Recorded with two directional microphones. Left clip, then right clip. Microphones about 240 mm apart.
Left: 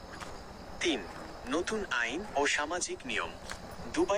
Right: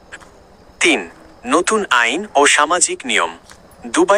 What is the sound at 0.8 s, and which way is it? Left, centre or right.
Speech, right.